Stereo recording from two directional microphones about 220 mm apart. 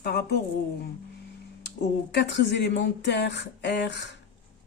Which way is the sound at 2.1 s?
50° left (ahead or behind).